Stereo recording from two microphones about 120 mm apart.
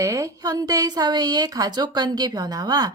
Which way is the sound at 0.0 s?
25° right (ahead or behind).